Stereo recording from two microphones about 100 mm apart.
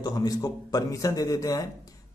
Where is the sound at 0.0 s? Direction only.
40° left (ahead or behind).